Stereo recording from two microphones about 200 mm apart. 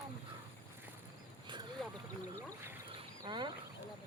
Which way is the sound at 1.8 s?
Centre (ahead or behind).